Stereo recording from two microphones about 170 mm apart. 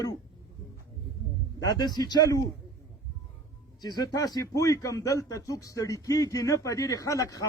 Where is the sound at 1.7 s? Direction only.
20° left (ahead or behind).